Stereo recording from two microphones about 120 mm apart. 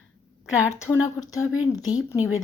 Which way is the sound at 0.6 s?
20° left (ahead or behind).